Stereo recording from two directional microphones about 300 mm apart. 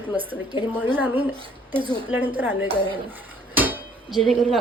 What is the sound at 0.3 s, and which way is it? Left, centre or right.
Speech, centre.